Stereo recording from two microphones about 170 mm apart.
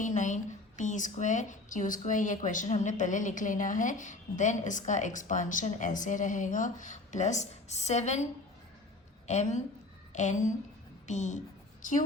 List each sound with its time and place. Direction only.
0.0 s a woman's voice: 45° left (ahead or behind)